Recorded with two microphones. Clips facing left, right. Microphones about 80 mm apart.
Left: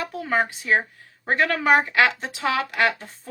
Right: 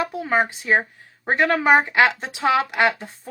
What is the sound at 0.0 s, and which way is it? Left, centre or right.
Speech, right.